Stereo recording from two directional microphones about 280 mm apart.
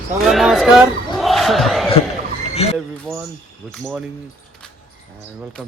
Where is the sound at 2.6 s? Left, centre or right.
Left.